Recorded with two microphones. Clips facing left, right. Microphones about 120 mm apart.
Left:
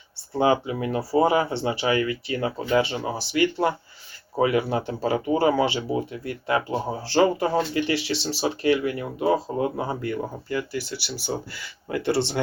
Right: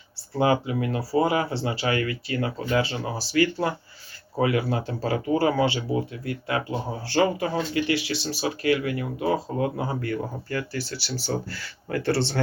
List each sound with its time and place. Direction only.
0.3 s speech: 25° left (ahead or behind)
10.2 s speech: 15° left (ahead or behind)